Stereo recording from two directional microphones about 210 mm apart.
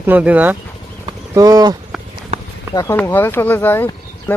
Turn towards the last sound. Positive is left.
turn(degrees=10)  # may be behind; listen again after turning